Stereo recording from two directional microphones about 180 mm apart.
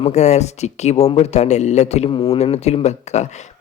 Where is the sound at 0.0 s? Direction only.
40° left (ahead or behind).